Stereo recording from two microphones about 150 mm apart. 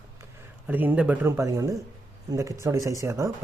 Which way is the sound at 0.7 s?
10° right (ahead or behind).